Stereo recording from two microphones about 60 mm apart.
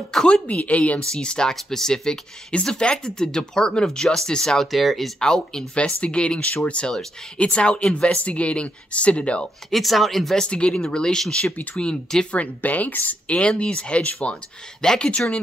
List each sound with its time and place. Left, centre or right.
0.1 s speech: centre
5.2 s speech: centre
9.7 s speech: centre
10.3 s speech: centre